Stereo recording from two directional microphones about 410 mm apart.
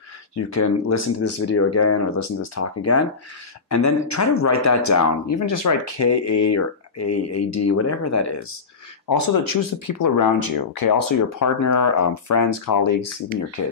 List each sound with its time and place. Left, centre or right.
0.4 s speech: left
9.1 s speech: left